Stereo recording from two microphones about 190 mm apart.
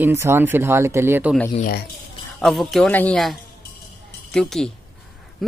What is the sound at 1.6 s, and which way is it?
Speech, 50° left (ahead or behind).